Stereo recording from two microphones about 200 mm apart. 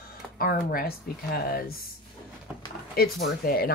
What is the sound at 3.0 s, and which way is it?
Speech, 50° left (ahead or behind).